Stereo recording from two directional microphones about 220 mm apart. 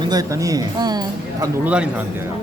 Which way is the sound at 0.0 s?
15° right (ahead or behind).